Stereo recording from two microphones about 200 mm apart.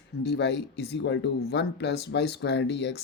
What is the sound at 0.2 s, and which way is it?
Speech, 60° left (ahead or behind).